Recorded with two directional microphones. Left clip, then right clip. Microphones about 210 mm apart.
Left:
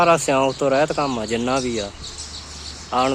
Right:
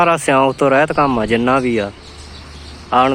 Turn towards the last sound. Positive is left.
turn(degrees=-5)  # may be behind; listen again after turning